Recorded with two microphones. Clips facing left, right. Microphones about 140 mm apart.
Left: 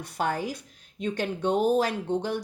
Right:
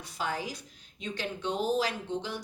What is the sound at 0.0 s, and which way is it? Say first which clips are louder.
Speech: left 6 dB; 55° left (ahead or behind).